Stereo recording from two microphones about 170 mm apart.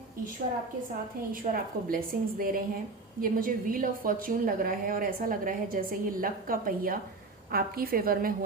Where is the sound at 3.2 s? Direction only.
55° right (ahead or behind).